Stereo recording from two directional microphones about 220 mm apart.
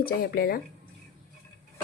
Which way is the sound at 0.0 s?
45° left (ahead or behind).